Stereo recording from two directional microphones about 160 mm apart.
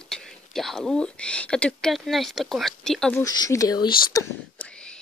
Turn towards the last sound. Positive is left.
turn(degrees=5)  # may be behind; listen again after turning